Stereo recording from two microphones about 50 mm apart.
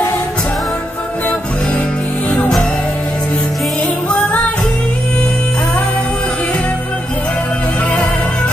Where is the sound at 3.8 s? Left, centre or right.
Left.